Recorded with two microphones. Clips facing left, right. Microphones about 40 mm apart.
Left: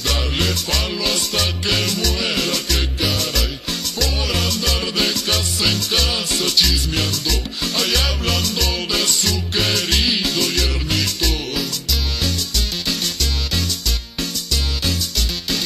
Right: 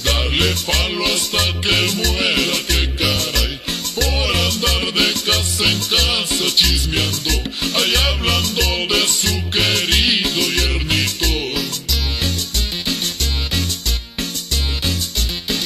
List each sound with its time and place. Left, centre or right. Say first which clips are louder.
0.0 s music: right 3 dB; right
4.0 s music: right 4 dB; right